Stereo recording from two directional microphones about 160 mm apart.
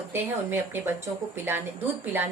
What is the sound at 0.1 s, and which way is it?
Speech, 15° right (ahead or behind).